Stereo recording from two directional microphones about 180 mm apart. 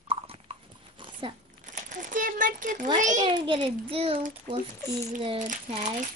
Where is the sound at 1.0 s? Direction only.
25° right (ahead or behind).